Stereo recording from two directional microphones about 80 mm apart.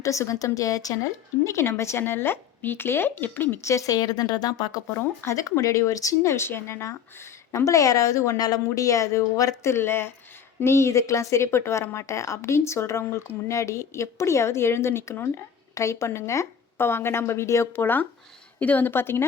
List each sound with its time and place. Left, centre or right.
0.0 s a woman's voice: left
3.6 s a woman's voice: left
4.9 s a woman's voice: left
9.7 s speech: left